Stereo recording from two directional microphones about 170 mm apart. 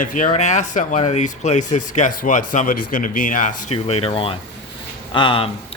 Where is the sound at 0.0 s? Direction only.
50° left (ahead or behind).